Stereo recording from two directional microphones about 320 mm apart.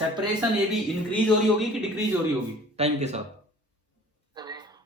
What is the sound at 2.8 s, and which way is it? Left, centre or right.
Speech, right.